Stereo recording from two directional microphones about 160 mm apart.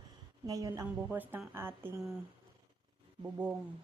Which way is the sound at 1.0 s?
10° right (ahead or behind).